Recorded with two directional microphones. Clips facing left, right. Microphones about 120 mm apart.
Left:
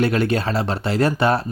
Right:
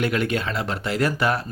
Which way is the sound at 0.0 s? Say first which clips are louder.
Left 4 dB; 30° left (ahead or behind).